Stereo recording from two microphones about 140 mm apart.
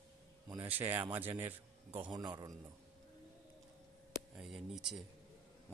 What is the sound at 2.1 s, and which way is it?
Speech, 30° right (ahead or behind).